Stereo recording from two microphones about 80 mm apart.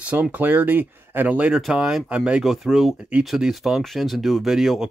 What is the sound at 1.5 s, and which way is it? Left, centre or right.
Speech, centre.